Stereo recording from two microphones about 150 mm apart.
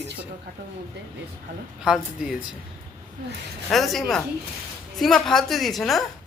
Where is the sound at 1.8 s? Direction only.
5° right (ahead or behind).